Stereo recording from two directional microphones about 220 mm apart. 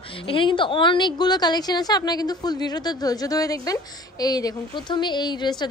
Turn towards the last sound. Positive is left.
turn(degrees=20)  # may be behind; listen again after turning